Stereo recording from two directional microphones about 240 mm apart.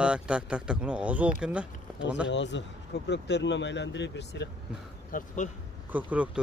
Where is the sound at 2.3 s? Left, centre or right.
Left.